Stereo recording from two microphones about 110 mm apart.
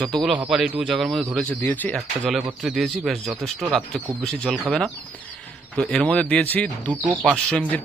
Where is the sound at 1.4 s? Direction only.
15° left (ahead or behind).